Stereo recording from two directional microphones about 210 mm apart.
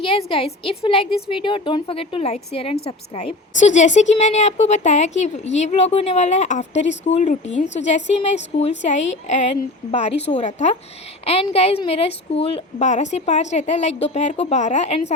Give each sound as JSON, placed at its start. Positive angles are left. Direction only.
{"t": 0.0, "sound": "a woman's voice", "side_deg": 25}